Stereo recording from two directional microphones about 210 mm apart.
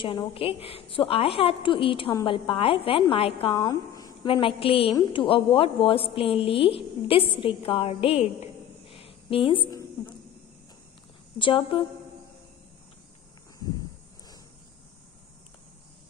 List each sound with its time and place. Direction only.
0.0 s a woman's voice: 25° left (ahead or behind)
11.3 s a woman's voice: 25° left (ahead or behind)